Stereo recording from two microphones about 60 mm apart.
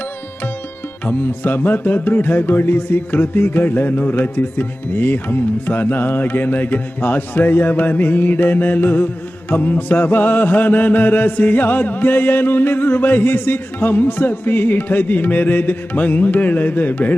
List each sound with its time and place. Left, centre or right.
1.0 s music: left